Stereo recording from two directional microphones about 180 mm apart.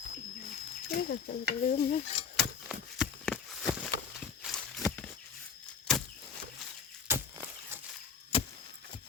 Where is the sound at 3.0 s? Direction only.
Centre (ahead or behind).